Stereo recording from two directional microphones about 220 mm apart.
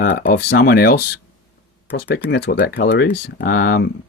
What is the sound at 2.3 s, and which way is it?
Speech, 45° left (ahead or behind).